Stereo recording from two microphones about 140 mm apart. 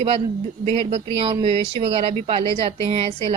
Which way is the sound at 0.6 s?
45° right (ahead or behind).